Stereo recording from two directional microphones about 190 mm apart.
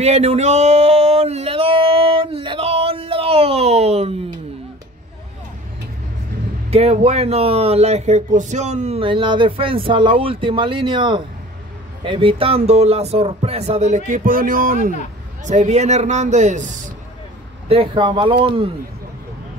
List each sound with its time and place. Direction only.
0.0 s a sound: 35° right (ahead or behind)
6.7 s speech: 35° right (ahead or behind); by 15.0 s 50° right (ahead or behind)
15.4 s speech: 40° right (ahead or behind)
17.6 s speech: 25° right (ahead or behind)